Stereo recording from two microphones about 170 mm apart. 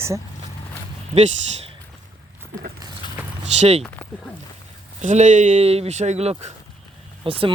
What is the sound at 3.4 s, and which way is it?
Speech, 40° right (ahead or behind).